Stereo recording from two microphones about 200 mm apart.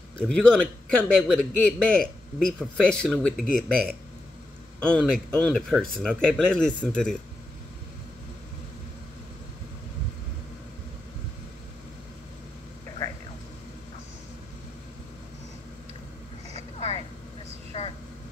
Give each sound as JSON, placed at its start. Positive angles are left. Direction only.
{"t": 0.2, "sound": "a man's voice", "side_deg": 5}
{"t": 17.7, "sound": "vehicle", "side_deg": 30}